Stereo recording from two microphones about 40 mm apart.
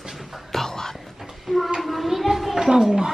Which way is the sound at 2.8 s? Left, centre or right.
Centre.